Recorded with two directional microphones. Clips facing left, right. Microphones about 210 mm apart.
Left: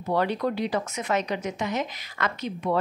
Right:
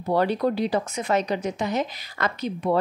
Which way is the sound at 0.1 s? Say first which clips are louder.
Right 3 dB; 35° right (ahead or behind).